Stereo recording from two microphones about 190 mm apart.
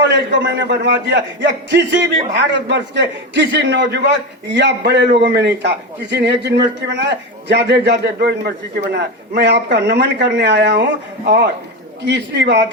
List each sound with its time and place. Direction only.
0.0 s a man's voice: 65° right (ahead or behind)
12.0 s a man's voice: 65° right (ahead or behind)